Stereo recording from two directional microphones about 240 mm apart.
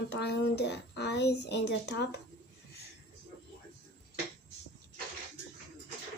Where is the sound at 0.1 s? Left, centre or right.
Left.